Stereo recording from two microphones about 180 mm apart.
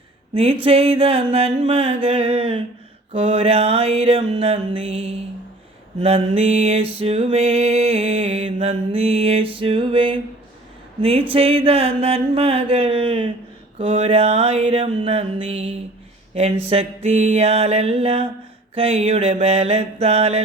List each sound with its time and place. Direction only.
0.3 s music: 35° right (ahead or behind)